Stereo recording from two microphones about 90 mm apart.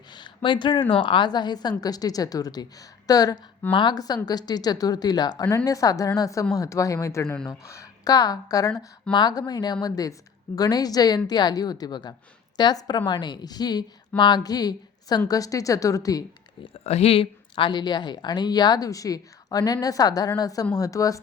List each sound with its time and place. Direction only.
0.1 s a woman's voice: 60° left (ahead or behind); by 3.3 s 45° left (ahead or behind)
3.7 s speech: 65° left (ahead or behind)
3.9 s speech: 45° left (ahead or behind)
9.1 s speech: 55° left (ahead or behind)
16.7 s speech: 90° left; by 21.2 s 40° left (ahead or behind)